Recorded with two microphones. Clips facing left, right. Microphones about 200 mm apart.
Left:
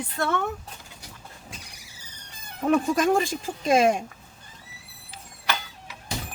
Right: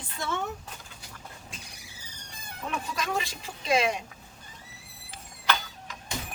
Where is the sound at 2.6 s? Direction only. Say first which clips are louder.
Left 13 dB; 50° left (ahead or behind).